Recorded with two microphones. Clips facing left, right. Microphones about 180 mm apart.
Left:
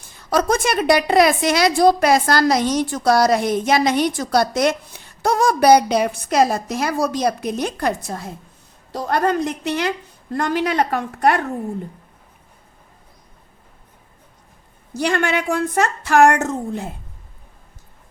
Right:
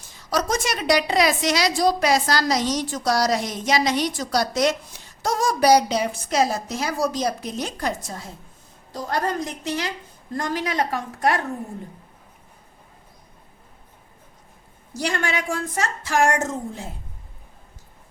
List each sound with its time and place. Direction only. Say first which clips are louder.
0.1 s a woman's voice: left 5 dB; 55° left (ahead or behind)
14.9 s a woman's voice: left 6 dB; 60° left (ahead or behind)